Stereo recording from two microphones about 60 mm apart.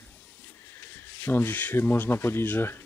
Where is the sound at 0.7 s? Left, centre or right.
Left.